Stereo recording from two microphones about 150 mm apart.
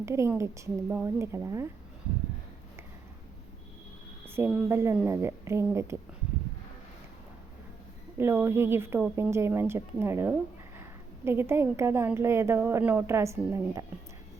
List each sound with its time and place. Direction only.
0.0 s a woman's voice: 20° right (ahead or behind)
4.3 s a woman's voice: 15° right (ahead or behind)
8.2 s a woman's voice: 15° right (ahead or behind)